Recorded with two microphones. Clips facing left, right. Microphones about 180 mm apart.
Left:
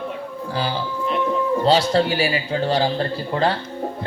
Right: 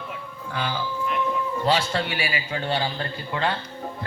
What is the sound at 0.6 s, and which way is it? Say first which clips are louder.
A man's voice: left 3 dB; 35° left (ahead or behind).